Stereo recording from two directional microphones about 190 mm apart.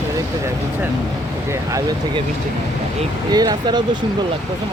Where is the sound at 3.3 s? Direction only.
20° right (ahead or behind).